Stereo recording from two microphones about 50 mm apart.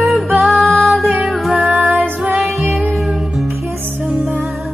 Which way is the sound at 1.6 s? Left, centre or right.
Right.